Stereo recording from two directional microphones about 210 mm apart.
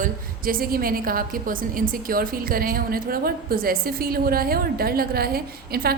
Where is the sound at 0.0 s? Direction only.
45° right (ahead or behind).